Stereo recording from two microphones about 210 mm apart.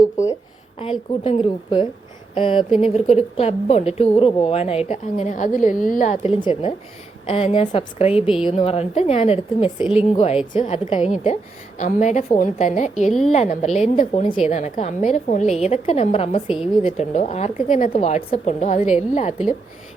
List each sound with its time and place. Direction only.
0.8 s a woman's voice: 25° left (ahead or behind)
13.1 s a woman's voice: centre (ahead or behind)
13.3 s a woman's voice: 30° left (ahead or behind)